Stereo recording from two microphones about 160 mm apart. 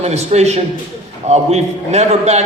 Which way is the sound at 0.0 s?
40° right (ahead or behind).